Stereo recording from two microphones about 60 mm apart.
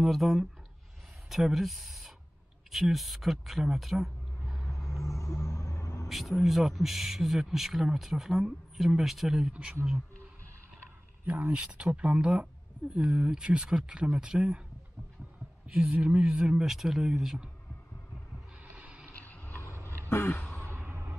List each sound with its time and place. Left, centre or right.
0.0 s speech: centre
5.0 s rumble: left
6.0 s speech: centre
9.5 s speech: right
11.2 s speech: right
15.7 s speech: right
18.6 s a sound: right
19.1 s mechanisms: left
19.7 s a sound: right
20.2 s a sound: left